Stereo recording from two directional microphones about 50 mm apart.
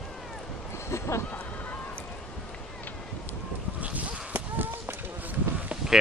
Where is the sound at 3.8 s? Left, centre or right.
Right.